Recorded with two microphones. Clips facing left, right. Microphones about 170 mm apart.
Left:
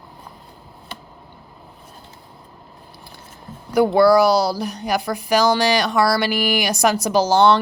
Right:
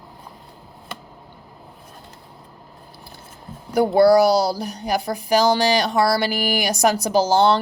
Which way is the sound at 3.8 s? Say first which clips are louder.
Even; 35° right (ahead or behind).